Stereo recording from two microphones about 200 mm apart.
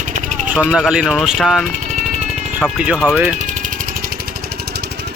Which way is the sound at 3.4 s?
40° right (ahead or behind).